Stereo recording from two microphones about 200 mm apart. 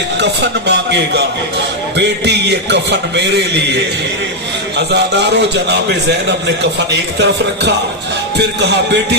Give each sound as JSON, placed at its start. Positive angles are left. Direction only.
{"t": 0.2, "sound": "a man's voice", "side_deg": -60}
{"t": 4.9, "sound": "a man's voice", "side_deg": -60}